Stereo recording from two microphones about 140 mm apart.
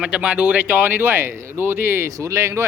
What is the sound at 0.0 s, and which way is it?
Speech, 5° right (ahead or behind).